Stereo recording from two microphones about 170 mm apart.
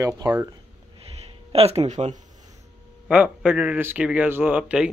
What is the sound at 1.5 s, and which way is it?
Speech, 35° right (ahead or behind).